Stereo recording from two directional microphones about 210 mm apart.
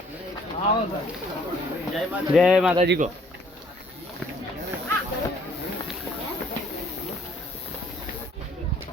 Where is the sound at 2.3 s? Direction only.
Centre (ahead or behind).